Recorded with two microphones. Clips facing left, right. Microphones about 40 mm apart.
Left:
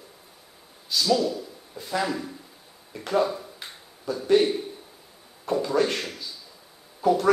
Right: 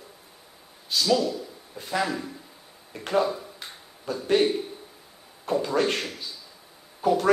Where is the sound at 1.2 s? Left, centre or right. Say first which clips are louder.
Left 1 dB; right.